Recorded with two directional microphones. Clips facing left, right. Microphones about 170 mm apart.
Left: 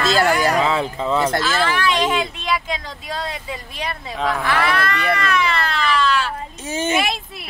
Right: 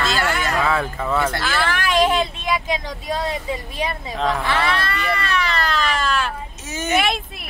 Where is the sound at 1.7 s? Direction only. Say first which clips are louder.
Right 1 dB; 50° right (ahead or behind).